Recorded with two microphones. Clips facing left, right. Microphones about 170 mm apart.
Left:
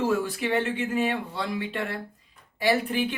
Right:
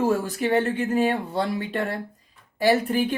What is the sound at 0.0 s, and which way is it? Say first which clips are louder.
Speech: right 3 dB; 40° right (ahead or behind).